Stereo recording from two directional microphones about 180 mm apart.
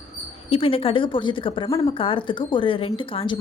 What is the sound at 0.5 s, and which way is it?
Speech, 30° left (ahead or behind).